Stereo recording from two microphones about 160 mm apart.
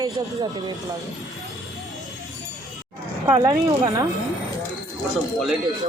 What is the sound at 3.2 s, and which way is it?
Speech, 25° right (ahead or behind).